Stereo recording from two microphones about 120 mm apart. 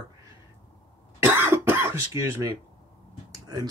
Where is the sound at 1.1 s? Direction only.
20° right (ahead or behind).